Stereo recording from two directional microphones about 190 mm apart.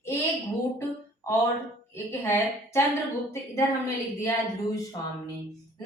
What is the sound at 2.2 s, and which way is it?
A woman's voice, 15° left (ahead or behind).